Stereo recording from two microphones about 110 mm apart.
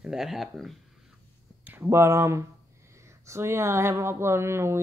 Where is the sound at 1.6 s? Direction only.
20° right (ahead or behind).